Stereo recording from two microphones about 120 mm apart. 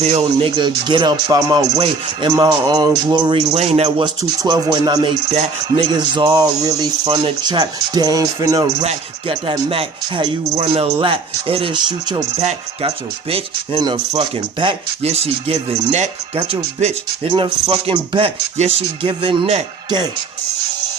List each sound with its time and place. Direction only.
0.0 s speech: 55° right (ahead or behind); by 1.6 s 30° right (ahead or behind)
1.7 s speech: 50° right (ahead or behind)
2.3 s speech: 35° right (ahead or behind)
3.5 s speech: 55° right (ahead or behind)
4.0 s speech: 35° right (ahead or behind)
9.5 s speech: 50° right (ahead or behind)
11.0 s speech: 50° right (ahead or behind)
12.4 s speech: 60° right (ahead or behind)
13.7 s speech: 35° right (ahead or behind)
15.0 s speech: 60° right (ahead or behind)
16.4 s speech: 45° right (ahead or behind)
18.5 s speech: 65° right (ahead or behind)
19.0 s speech: 45° right (ahead or behind)